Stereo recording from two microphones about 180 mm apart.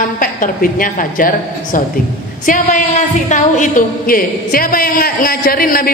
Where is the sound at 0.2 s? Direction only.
50° left (ahead or behind).